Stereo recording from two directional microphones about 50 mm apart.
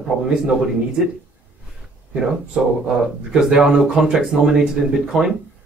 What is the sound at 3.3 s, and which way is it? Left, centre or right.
Speech, centre.